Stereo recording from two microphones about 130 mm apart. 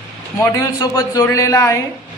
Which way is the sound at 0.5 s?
25° left (ahead or behind).